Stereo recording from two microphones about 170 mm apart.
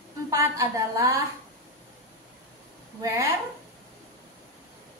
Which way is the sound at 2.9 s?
20° right (ahead or behind).